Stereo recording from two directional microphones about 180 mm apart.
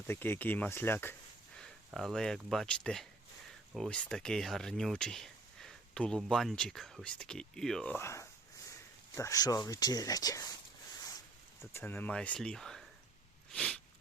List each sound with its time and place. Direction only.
0.1 s speech: 10° left (ahead or behind)
1.5 s speech: centre (ahead or behind); by 10.6 s 20° left (ahead or behind)
11.7 s speech: 10° left (ahead or behind)
13.5 s sneeze: 5° left (ahead or behind)